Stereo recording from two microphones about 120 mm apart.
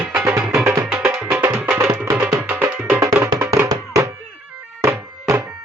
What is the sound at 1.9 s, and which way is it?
Music, 25° right (ahead or behind).